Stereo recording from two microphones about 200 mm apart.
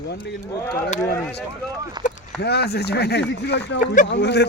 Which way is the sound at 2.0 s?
20° right (ahead or behind).